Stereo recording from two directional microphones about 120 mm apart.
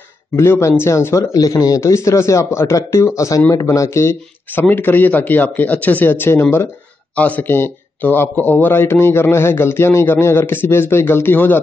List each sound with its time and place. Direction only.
0.4 s a man's voice: 20° left (ahead or behind)